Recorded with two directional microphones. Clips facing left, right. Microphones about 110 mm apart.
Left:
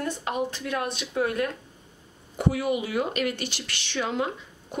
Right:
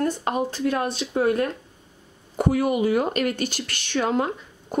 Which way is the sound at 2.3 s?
50° right (ahead or behind).